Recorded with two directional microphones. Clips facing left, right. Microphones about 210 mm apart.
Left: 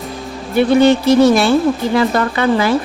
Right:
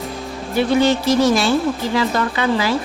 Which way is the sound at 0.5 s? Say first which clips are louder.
Left 5 dB; 60° left (ahead or behind).